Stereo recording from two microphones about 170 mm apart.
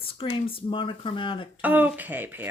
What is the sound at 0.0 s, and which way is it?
Speech, 30° left (ahead or behind).